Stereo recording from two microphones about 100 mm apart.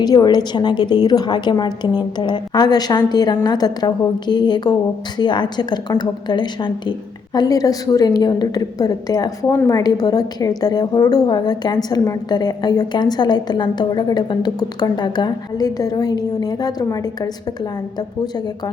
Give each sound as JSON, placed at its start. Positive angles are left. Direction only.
{"t": 0.0, "sound": "a woman's voice", "side_deg": 40}
{"t": 7.3, "sound": "a woman's voice", "side_deg": 40}